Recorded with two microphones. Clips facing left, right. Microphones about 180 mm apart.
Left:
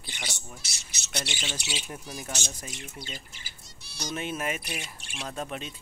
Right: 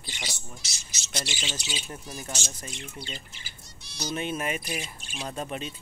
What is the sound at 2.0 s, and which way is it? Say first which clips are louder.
Speech: even; centre (ahead or behind).